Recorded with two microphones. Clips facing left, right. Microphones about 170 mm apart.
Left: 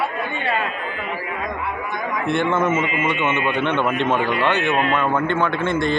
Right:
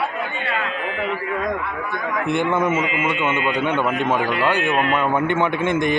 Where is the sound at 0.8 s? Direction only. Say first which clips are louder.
Right 4 dB; 90° right.